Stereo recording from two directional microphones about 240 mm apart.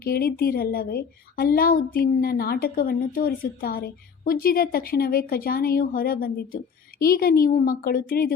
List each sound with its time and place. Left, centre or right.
0.0 s a woman's voice: left